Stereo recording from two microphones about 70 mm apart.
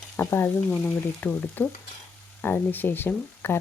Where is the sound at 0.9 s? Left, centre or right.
Left.